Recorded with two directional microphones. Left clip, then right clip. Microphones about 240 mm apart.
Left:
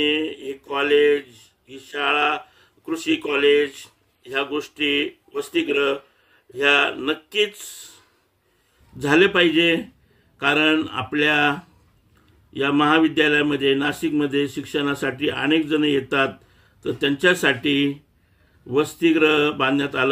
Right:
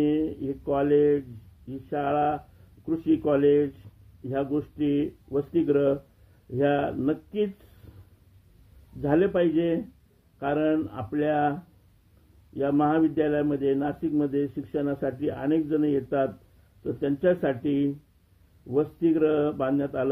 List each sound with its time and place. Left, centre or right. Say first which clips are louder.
0.0 s speech: left 4 dB; left
9.0 s speech: left 7 dB; left
12.5 s speech: left 6 dB; left